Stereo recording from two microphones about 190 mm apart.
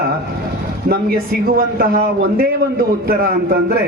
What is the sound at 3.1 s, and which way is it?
Speech, 50° right (ahead or behind).